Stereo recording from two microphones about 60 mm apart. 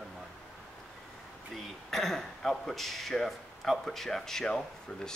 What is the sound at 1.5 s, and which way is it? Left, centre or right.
A man's voice, centre.